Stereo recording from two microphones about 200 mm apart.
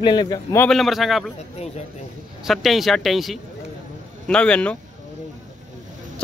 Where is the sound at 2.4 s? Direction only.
Centre (ahead or behind).